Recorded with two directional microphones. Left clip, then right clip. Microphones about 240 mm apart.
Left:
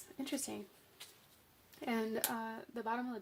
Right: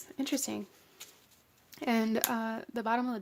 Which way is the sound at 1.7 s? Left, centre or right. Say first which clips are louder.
Right 7 dB; right.